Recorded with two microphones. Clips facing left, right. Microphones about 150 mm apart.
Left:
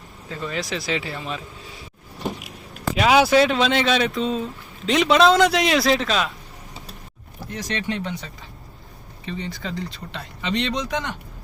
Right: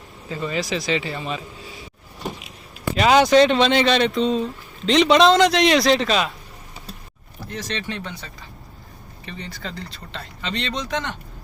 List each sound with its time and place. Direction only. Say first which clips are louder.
0.3 s speech: right 3 dB; 5° right (ahead or behind)
2.9 s speech: right 2 dB; 5° left (ahead or behind)
7.5 s speech: left 2 dB; 15° left (ahead or behind)